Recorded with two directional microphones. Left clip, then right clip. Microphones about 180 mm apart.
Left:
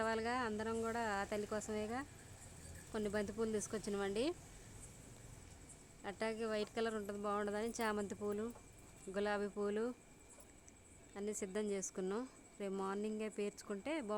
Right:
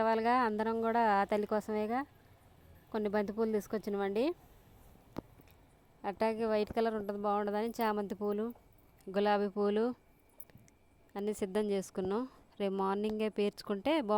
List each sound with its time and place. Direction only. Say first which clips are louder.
0.0 s speech: right 9 dB; 40° right (ahead or behind)
6.0 s speech: right 9 dB; 40° right (ahead or behind)
11.1 s speech: right 8 dB; 45° right (ahead or behind)